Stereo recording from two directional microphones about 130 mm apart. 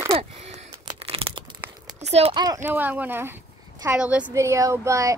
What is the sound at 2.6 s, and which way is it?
Speech, 15° right (ahead or behind).